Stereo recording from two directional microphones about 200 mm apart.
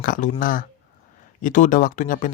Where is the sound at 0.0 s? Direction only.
45° left (ahead or behind).